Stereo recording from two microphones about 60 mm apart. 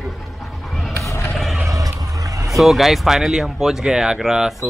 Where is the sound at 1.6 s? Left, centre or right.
Right.